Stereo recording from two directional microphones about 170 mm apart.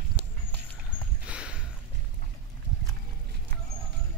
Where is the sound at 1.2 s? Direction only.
5° right (ahead or behind).